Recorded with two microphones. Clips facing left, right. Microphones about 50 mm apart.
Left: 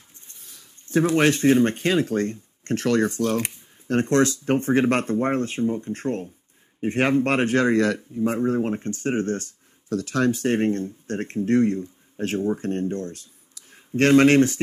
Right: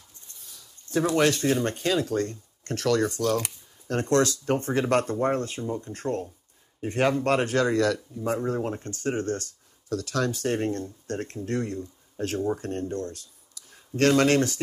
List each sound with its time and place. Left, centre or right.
0.3 s speech: left